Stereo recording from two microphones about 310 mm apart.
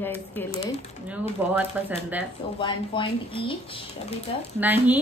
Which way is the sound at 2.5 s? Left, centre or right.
Centre.